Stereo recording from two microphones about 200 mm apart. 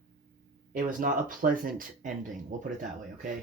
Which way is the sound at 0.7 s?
45° right (ahead or behind).